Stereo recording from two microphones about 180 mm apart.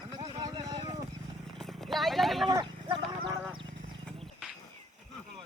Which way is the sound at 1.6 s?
Centre (ahead or behind).